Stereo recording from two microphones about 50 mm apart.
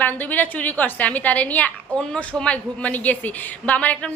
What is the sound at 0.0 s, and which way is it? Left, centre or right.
A woman's voice, left.